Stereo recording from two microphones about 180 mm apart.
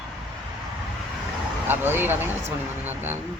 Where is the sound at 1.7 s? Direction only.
10° right (ahead or behind).